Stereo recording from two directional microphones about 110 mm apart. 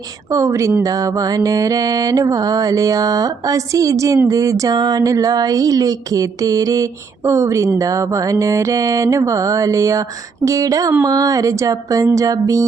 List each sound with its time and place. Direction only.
0.3 s mantra: 30° right (ahead or behind)